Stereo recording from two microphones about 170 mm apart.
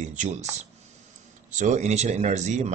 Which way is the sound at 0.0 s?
45° right (ahead or behind).